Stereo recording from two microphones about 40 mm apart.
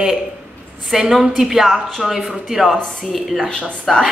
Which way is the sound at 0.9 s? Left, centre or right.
Centre.